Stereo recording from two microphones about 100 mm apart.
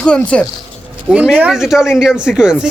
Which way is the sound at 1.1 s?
10° right (ahead or behind).